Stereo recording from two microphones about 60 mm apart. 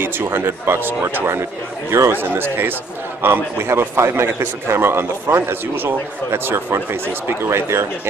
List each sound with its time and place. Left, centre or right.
0.0 s a man's voice: right